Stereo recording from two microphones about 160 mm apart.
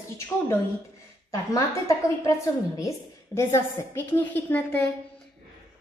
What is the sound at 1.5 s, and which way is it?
Speech, 20° left (ahead or behind).